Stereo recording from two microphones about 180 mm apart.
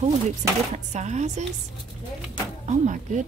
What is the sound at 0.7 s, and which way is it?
Speech, 40° right (ahead or behind).